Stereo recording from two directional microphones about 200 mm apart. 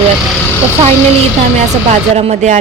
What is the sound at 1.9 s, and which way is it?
Speech, 35° right (ahead or behind).